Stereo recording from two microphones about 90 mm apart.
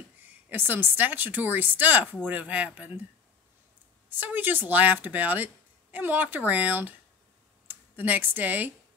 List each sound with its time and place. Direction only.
0.5 s a woman's voice: 20° right (ahead or behind)
4.2 s a woman's voice: 20° right (ahead or behind)